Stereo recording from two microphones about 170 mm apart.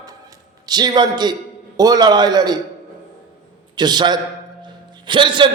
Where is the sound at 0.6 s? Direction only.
25° right (ahead or behind).